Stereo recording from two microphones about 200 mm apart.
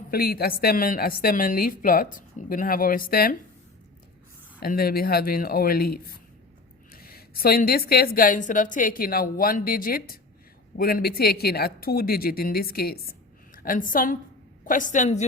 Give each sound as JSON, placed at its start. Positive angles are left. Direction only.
{"t": 0.1, "sound": "a woman's voice", "side_deg": 50}
{"t": 4.6, "sound": "a woman's voice", "side_deg": 50}